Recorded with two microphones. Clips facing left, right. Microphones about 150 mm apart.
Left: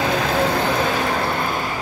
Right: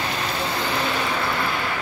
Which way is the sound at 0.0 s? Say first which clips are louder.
Left 7 dB; 90° left.